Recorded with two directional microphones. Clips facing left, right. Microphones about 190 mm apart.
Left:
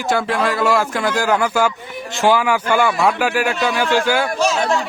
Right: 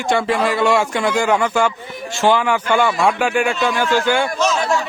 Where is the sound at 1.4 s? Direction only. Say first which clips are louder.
Even; 5° left (ahead or behind).